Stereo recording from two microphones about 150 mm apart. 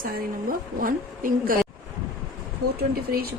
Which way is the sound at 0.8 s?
65° right (ahead or behind).